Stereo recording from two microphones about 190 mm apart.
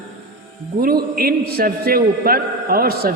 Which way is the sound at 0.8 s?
55° right (ahead or behind).